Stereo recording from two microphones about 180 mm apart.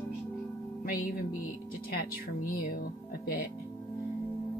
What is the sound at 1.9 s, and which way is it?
Speech, 55° left (ahead or behind).